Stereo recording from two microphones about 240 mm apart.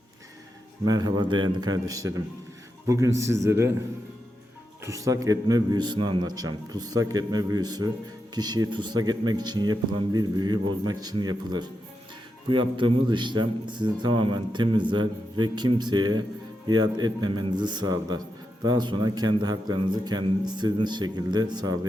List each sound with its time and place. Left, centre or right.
0.9 s a man's voice: centre
4.8 s a man's voice: centre